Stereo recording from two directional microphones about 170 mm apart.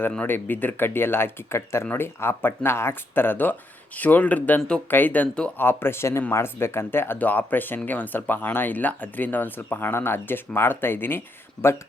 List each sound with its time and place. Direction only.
0.0 s speech: 10° left (ahead or behind)
11.6 s speech: 25° left (ahead or behind)